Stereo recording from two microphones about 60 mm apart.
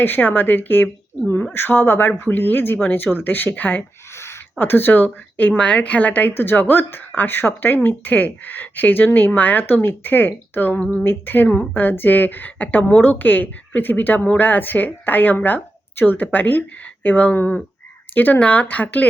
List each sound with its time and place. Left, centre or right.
0.0 s speech: left
4.1 s a sound: left
4.5 s speech: left
5.5 s a woman's voice: left
6.3 s a woman's voice: left